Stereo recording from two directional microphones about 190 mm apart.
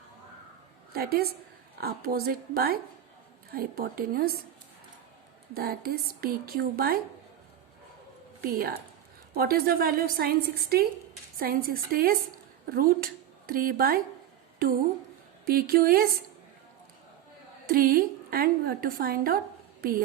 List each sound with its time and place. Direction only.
0.9 s a woman's voice: 55° right (ahead or behind)
5.5 s a woman's voice: 55° right (ahead or behind)
8.4 s a woman's voice: 50° right (ahead or behind)
15.4 s a woman's voice: 50° right (ahead or behind)
17.7 s a woman's voice: 50° right (ahead or behind)